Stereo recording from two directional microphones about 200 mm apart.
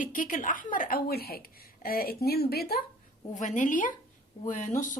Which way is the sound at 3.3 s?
40° left (ahead or behind).